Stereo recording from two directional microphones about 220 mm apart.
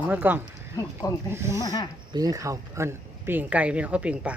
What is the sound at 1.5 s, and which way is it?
Speech, 15° left (ahead or behind).